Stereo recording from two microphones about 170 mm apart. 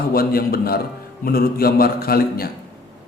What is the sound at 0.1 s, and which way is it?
A man's voice, 60° left (ahead or behind).